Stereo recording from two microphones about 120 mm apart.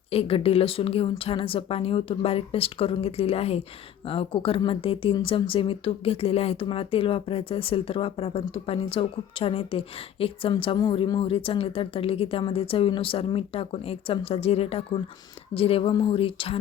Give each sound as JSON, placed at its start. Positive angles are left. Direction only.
{"t": 0.1, "sound": "speech", "side_deg": 55}